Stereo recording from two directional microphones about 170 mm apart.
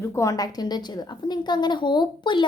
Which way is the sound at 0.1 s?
20° left (ahead or behind).